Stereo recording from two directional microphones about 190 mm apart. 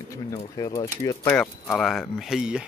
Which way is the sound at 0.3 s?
20° left (ahead or behind).